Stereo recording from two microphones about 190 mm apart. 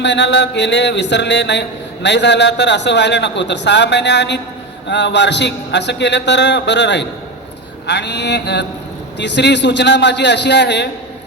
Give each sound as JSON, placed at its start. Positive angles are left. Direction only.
{"t": 0.0, "sound": "mantra", "side_deg": 65}